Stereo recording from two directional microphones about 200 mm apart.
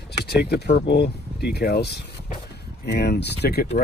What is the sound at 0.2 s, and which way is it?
Speech, 55° left (ahead or behind).